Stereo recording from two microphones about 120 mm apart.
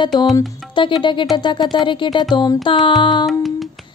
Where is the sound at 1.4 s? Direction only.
40° left (ahead or behind).